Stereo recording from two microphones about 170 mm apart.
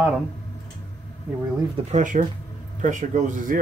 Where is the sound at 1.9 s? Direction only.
50° right (ahead or behind).